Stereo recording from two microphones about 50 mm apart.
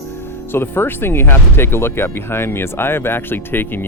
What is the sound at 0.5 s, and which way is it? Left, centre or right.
Speech, left.